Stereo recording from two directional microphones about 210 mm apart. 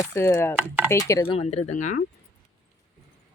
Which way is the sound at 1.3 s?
30° left (ahead or behind).